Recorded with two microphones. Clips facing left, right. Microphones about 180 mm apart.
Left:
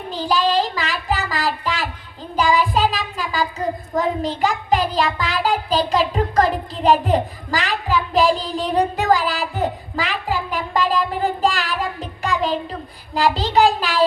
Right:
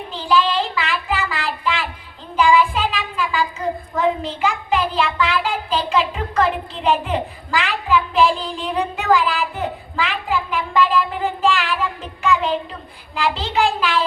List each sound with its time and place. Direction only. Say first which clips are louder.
0.1 s child singing: even; 40° left (ahead or behind)
3.9 s a child's voice: even; 40° left (ahead or behind)